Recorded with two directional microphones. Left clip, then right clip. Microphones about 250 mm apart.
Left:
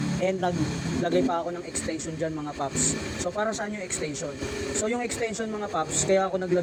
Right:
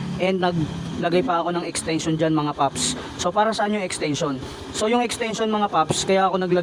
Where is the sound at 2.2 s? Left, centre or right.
Right.